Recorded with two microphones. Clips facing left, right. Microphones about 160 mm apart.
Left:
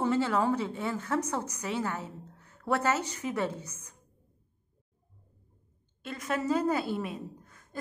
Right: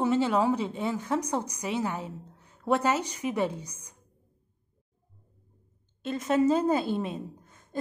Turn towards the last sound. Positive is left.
turn(degrees=-25)  # may be behind; listen again after turning